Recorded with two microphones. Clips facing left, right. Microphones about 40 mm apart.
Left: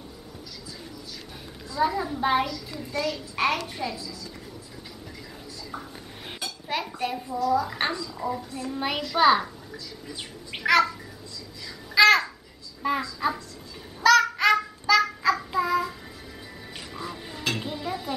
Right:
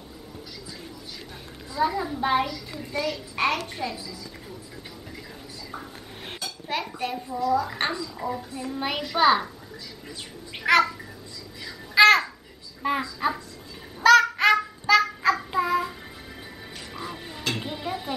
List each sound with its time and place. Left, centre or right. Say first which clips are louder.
1.8 s a child's voice: even; centre
2.4 s a child's voice: even; centre
3.9 s a child's voice: even; centre
5.7 s a sound: even; centre
6.4 s dishes: even; centre
7.4 s a child's voice: even; centre
10.6 s a child's voice: right 1 dB; centre
11.6 s babbling: right 2 dB; centre
12.8 s a child's voice: right 1 dB; centre
14.0 s goose: right 2 dB; centre
15.5 s child singing: even; centre
16.9 s music: even; centre
17.5 s a sound: even; centre